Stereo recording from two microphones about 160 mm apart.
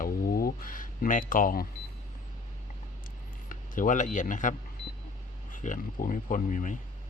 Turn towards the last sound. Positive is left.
turn(degrees=55)  # may be behind; listen again after turning